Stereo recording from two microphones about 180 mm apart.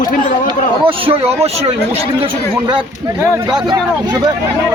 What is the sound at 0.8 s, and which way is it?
Speech, 30° right (ahead or behind).